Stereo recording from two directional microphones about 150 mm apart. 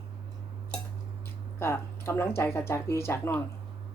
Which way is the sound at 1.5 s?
15° left (ahead or behind).